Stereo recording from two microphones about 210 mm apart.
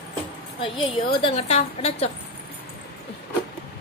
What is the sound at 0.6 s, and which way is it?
A woman's voice, 25° left (ahead or behind).